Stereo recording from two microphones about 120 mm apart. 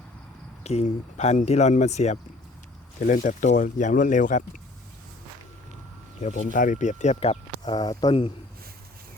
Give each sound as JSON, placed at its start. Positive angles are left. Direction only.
{"t": 0.6, "sound": "speech", "side_deg": 65}
{"t": 3.1, "sound": "speech", "side_deg": 90}
{"t": 6.1, "sound": "speech", "side_deg": 85}
{"t": 7.6, "sound": "speech", "side_deg": 35}